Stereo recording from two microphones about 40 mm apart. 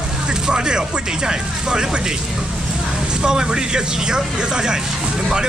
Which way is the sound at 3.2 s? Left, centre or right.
Centre.